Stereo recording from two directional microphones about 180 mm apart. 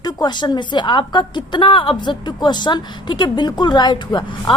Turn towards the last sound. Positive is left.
turn(degrees=25)  # may be behind; listen again after turning